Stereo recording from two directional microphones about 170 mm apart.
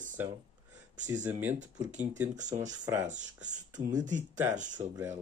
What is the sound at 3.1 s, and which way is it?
Speech, 45° right (ahead or behind).